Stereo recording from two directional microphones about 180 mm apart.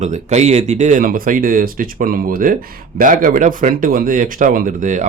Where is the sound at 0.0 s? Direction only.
40° right (ahead or behind).